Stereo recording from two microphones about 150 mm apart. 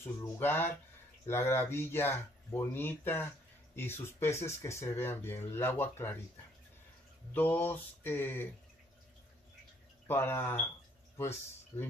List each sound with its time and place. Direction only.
0.0 s speech: 15° left (ahead or behind)
7.3 s speech: 10° left (ahead or behind)
10.0 s speech: 15° left (ahead or behind)